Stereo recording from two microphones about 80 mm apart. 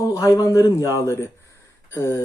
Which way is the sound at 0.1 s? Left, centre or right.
Left.